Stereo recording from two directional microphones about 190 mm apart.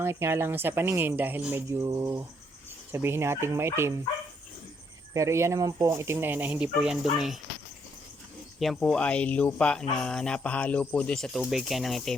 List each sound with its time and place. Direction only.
0.0 s speech: 15° right (ahead or behind)
5.1 s speech: 15° right (ahead or behind)
8.5 s speech: centre (ahead or behind)